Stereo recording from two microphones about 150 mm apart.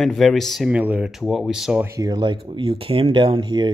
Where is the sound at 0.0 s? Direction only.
Centre (ahead or behind).